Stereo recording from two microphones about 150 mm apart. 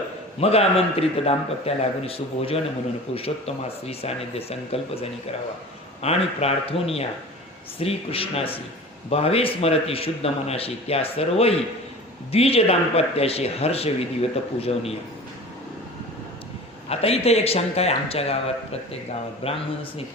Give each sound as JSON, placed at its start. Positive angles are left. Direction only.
{"t": 0.3, "sound": "speech", "side_deg": 40}
{"t": 16.9, "sound": "speech", "side_deg": 40}